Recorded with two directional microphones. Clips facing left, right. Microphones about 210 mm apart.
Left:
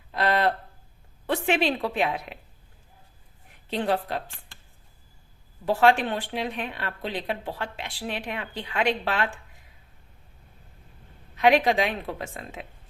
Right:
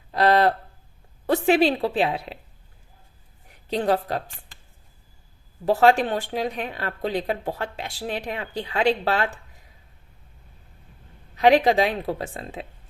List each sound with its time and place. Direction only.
0.1 s a sound: 40° right (ahead or behind)
1.3 s a woman's voice: 35° right (ahead or behind)
3.7 s speech: 40° right (ahead or behind)
5.6 s speech: 40° right (ahead or behind)
11.3 s speech: 35° right (ahead or behind)